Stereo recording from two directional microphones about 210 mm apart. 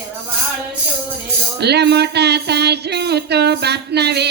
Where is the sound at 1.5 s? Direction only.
50° right (ahead or behind).